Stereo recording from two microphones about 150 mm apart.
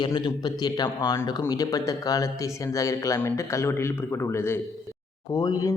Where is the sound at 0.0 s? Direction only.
30° left (ahead or behind).